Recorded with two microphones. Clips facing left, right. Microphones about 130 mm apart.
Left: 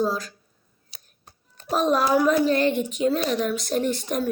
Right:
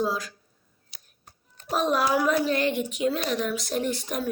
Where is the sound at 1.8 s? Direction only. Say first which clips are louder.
Left 4 dB; 40° left (ahead or behind).